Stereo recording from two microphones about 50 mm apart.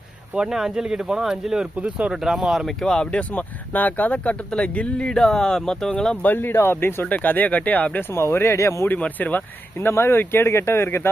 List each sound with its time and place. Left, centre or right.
0.3 s speech: centre
1.8 s speech: right
2.2 s speech: centre
2.6 s speech: centre
3.1 s speech: left
6.2 s speech: left
7.1 s speech: left
8.1 s speech: left
9.0 s speech: left
9.9 s speech: left